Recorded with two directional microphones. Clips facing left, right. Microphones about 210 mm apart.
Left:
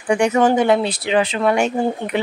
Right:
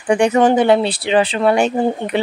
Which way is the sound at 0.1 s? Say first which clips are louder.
Right 2 dB; 35° right (ahead or behind).